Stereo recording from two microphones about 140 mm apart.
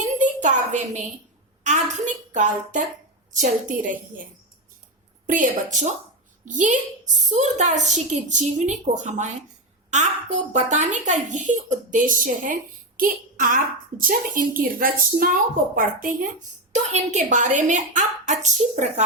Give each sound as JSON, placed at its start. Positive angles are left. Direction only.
{"t": 0.2, "sound": "a sound", "side_deg": -60}
{"t": 1.6, "sound": "a woman's voice", "side_deg": -60}
{"t": 5.2, "sound": "a woman's voice", "side_deg": -70}
{"t": 10.5, "sound": "a woman's voice", "side_deg": -55}
{"t": 13.0, "sound": "a woman's voice", "side_deg": -85}
{"t": 16.7, "sound": "a woman's voice", "side_deg": -55}